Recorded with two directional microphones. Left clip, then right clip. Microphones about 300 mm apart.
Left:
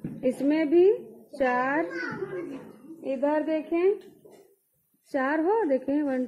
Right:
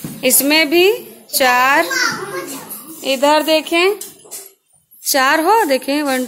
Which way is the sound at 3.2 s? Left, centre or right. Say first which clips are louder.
Right 14 dB; right.